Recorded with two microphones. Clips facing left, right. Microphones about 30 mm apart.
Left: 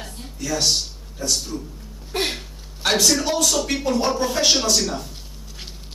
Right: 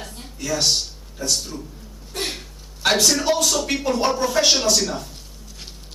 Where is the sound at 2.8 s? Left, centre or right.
Centre.